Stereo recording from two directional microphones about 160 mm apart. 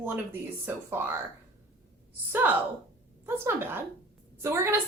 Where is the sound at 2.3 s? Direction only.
10° right (ahead or behind).